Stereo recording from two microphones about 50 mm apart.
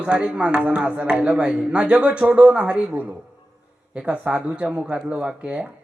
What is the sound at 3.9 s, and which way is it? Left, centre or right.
Speech, right.